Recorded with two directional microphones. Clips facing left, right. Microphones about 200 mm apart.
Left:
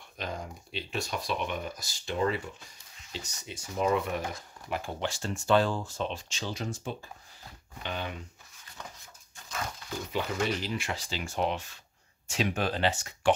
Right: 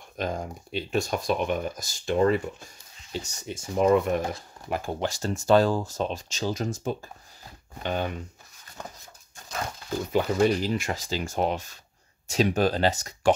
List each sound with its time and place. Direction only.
0.2 s speech: 45° right (ahead or behind)
8.8 s a sound: 50° right (ahead or behind)
9.5 s speech: 40° right (ahead or behind)